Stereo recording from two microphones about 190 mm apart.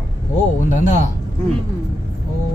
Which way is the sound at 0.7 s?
40° left (ahead or behind).